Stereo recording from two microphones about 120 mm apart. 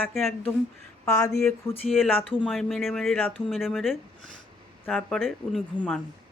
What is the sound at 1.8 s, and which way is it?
Speech, centre (ahead or behind).